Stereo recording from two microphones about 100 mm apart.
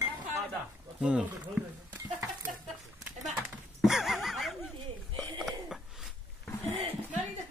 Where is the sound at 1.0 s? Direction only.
10° right (ahead or behind).